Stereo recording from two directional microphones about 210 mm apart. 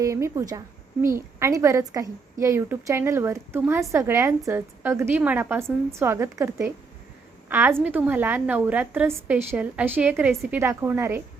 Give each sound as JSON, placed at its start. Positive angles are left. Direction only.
{"t": 0.0, "sound": "a woman's voice", "side_deg": -15}